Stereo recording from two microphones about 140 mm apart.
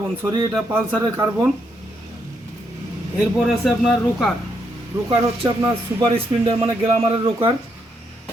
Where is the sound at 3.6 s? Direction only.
5° left (ahead or behind).